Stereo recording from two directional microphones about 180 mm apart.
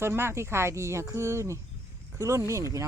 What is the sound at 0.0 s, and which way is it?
Speech, 15° right (ahead or behind).